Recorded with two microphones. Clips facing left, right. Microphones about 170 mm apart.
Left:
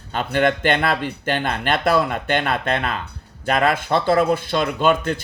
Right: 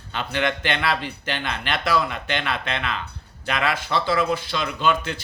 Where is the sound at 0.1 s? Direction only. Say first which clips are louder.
Left 6 dB; 45° left (ahead or behind).